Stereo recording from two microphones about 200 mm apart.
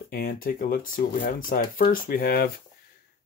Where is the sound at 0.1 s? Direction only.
45° left (ahead or behind).